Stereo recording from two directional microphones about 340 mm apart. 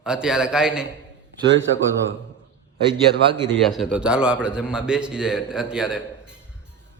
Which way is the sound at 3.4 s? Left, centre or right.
Centre.